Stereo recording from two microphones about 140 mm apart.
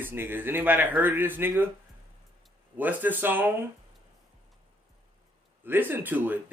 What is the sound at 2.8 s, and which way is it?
Speech, 10° right (ahead or behind).